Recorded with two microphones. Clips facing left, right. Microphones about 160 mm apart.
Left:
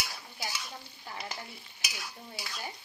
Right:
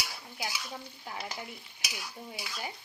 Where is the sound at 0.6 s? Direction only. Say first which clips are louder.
Right 3 dB; 5° right (ahead or behind).